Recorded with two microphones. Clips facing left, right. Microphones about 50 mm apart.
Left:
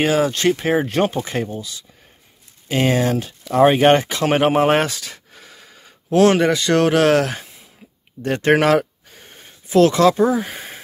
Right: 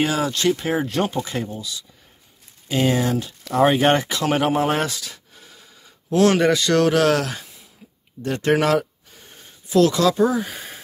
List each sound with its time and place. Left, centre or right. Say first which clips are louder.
0.0 s speech: left 3 dB; left
2.7 s speech: left 2 dB; left
5.4 s wheeze: left 4 dB; left
6.3 s speech: left 1 dB; centre
6.7 s speech: left 5 dB; left
10.2 s speech: left 2 dB; left